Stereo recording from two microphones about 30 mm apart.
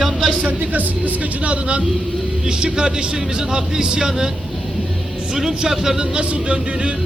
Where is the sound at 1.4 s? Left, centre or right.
Right.